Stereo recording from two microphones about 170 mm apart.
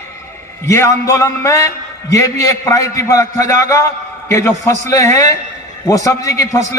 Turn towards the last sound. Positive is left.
turn(degrees=20)  # may be behind; listen again after turning